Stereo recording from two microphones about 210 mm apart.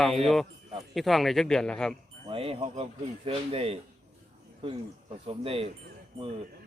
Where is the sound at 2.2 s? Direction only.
25° right (ahead or behind).